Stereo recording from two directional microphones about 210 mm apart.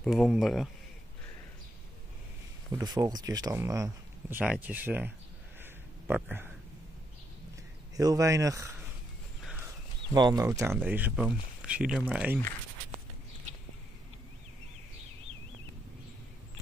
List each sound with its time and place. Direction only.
0.0 s speech: centre (ahead or behind)
2.7 s speech: 20° right (ahead or behind)
5.6 s a sound: 10° right (ahead or behind)
7.9 s speech: 15° right (ahead or behind)
10.1 s speech: 20° right (ahead or behind)